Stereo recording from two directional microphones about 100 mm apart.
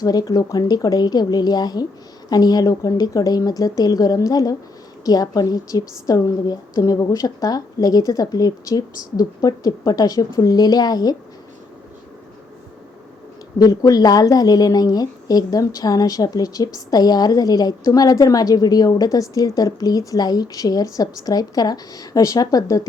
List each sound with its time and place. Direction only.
0.0 s a woman's voice: 40° left (ahead or behind)
13.6 s a woman's voice: 35° left (ahead or behind)